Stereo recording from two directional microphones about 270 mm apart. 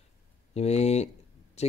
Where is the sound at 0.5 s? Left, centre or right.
Left.